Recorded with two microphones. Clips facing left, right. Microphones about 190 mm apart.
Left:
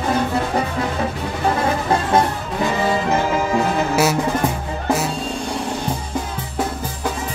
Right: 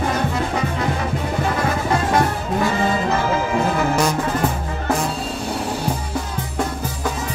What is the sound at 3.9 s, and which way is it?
Music, 5° left (ahead or behind).